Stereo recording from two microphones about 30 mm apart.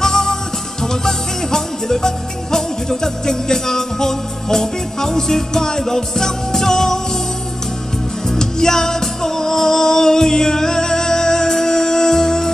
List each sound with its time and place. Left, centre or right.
0.0 s music: centre
8.3 s music: centre